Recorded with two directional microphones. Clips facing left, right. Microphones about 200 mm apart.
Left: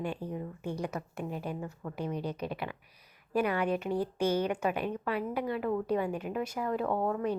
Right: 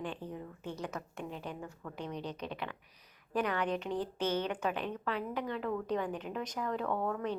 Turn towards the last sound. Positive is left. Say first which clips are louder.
# left 4 dB
turn(degrees=15)  # may be behind; listen again after turning